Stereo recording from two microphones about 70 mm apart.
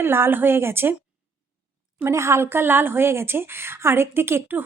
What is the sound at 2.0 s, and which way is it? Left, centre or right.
A woman's voice, right.